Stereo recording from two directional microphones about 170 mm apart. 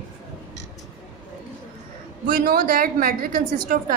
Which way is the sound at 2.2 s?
55° right (ahead or behind).